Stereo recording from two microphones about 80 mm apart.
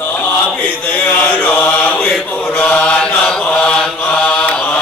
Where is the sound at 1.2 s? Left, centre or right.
Centre.